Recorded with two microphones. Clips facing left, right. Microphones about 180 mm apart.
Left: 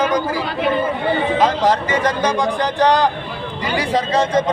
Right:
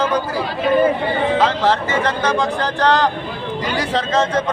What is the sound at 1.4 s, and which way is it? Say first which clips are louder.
Speech: left 1 dB; 15° left (ahead or behind).